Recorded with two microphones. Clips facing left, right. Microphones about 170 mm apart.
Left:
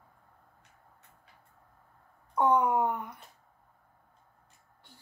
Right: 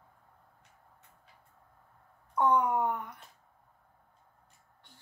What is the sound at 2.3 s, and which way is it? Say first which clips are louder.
Speech: left 2 dB; 15° left (ahead or behind).